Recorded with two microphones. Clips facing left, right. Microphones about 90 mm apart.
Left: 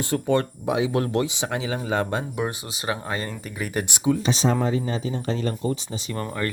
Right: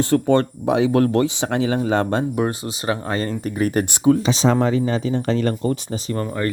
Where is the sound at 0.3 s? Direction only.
65° right (ahead or behind).